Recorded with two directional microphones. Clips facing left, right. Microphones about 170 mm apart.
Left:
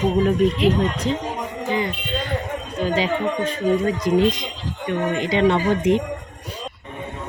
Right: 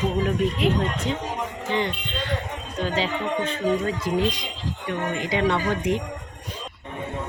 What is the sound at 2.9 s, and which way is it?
Speech, 15° left (ahead or behind).